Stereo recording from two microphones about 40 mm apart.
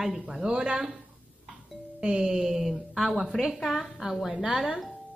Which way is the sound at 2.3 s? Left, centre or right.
Centre.